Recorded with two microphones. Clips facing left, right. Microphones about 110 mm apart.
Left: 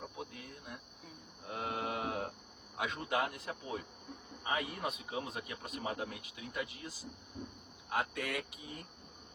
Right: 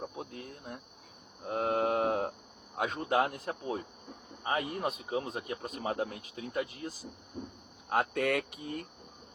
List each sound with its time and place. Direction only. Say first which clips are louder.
0.3 s cricket: right 5 dB; 40° right (ahead or behind)
1.5 s mantra: right 9 dB; 45° right (ahead or behind)
2.7 s speech: right 6 dB; 45° right (ahead or behind); by 8.9 s 65° right (ahead or behind)